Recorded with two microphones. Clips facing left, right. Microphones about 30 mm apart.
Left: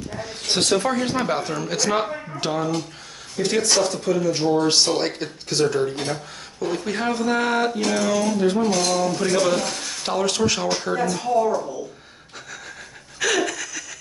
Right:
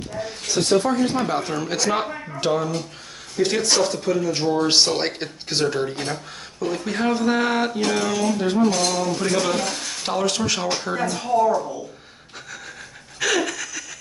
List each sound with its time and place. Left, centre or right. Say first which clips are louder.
0.5 s speech: even; left
1.1 s speech: even; centre
1.5 s speech: even; centre
6.6 s speech: right 1 dB; centre
13.2 s laughter: even; centre